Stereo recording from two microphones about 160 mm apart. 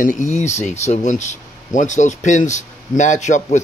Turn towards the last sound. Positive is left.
turn(degrees=50)  # may be behind; listen again after turning